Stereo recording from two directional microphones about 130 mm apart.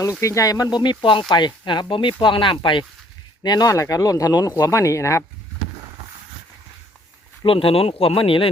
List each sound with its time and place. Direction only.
0.0 s speech: 25° left (ahead or behind)
7.4 s speech: 45° left (ahead or behind)